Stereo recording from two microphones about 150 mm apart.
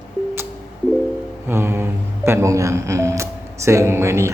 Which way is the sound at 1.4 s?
15° right (ahead or behind).